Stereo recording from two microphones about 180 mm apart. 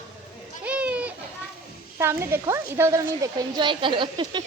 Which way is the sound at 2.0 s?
15° right (ahead or behind).